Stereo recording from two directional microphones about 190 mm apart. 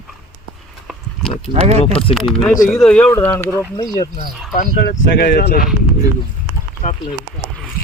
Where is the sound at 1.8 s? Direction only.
30° left (ahead or behind).